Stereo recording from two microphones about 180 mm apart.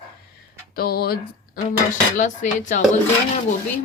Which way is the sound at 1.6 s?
45° left (ahead or behind).